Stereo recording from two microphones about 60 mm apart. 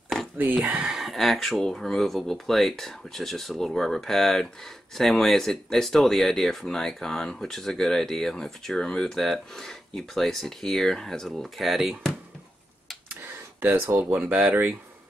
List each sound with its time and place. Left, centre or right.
0.4 s speech: right
0.9 s speech: centre
13.6 s speech: right
14.2 s speech: right